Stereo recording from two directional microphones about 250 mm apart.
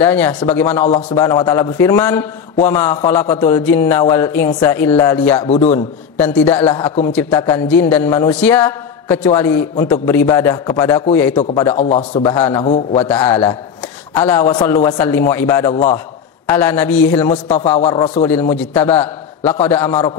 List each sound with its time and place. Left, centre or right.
0.0 s a man's voice: centre
5.4 s a man's voice: left
5.7 s a man's voice: centre
17.7 s a man's voice: left
18.2 s a man's voice: centre